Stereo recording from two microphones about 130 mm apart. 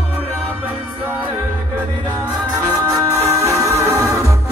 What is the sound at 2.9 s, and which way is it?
Music, 25° right (ahead or behind).